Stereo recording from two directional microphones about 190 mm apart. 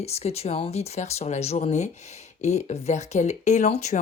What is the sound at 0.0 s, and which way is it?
Speech, 35° left (ahead or behind).